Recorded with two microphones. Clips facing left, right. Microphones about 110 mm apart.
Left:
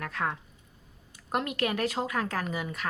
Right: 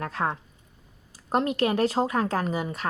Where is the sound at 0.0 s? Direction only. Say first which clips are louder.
Right 4 dB; 30° right (ahead or behind).